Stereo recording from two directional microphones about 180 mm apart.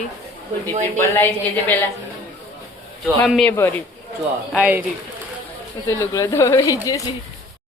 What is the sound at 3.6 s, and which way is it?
Speech, 15° left (ahead or behind).